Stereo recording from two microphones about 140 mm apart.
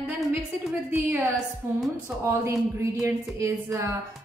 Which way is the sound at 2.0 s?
20° right (ahead or behind).